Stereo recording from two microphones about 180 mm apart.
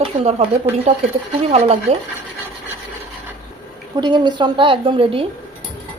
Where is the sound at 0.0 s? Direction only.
35° right (ahead or behind).